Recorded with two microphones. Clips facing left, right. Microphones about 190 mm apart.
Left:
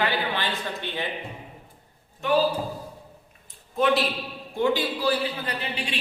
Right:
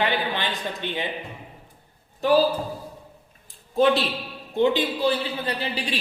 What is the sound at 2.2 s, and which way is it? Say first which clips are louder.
Speech: right 4 dB; 35° right (ahead or behind).